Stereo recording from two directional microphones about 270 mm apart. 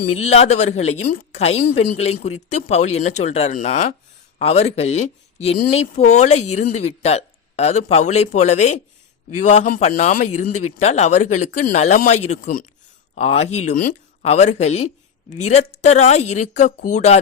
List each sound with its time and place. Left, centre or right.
0.2 s speech: left